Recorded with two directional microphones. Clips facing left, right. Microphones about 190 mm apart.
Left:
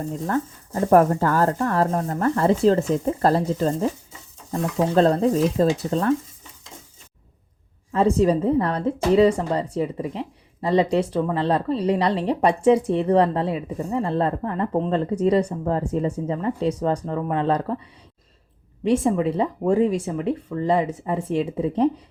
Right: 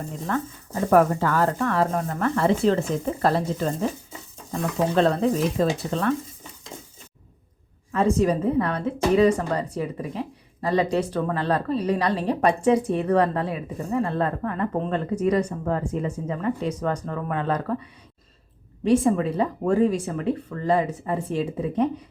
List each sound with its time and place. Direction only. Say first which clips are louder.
0.3 s speech: even; 40° left (ahead or behind)
4.9 s speech: left 3 dB; 40° left (ahead or behind)
7.9 s a woman's voice: left 2 dB; 30° left (ahead or behind)
18.9 s a woman's voice: even; 20° left (ahead or behind)